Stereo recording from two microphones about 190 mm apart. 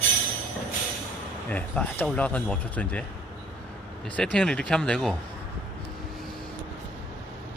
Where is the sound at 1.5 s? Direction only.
5° left (ahead or behind).